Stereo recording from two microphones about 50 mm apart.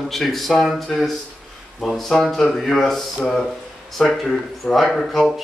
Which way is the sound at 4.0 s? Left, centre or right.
Centre.